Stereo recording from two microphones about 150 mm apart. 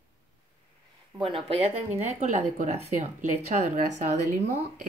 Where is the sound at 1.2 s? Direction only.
40° right (ahead or behind).